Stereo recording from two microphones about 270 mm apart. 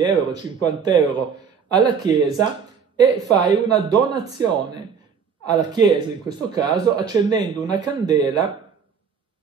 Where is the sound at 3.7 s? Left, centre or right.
Centre.